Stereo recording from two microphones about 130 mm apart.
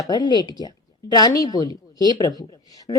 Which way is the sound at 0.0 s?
30° left (ahead or behind).